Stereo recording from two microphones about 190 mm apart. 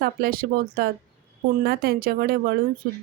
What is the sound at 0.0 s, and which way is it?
Speech, 50° right (ahead or behind).